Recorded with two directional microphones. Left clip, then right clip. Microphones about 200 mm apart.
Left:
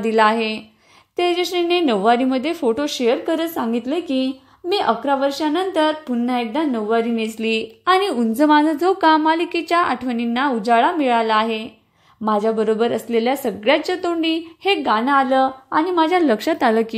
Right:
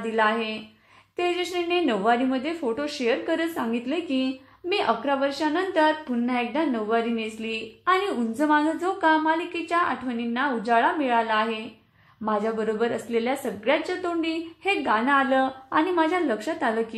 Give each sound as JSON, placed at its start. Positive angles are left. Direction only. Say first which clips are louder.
{"t": 0.0, "sound": "a woman's voice", "louder": "left 7 dB", "side_deg": 40}